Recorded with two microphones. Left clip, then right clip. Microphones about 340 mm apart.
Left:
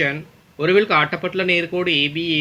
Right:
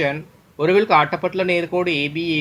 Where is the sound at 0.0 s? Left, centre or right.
Centre.